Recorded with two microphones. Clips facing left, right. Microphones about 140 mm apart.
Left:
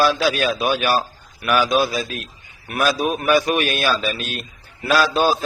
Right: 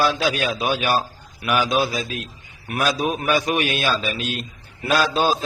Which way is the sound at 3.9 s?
15° right (ahead or behind).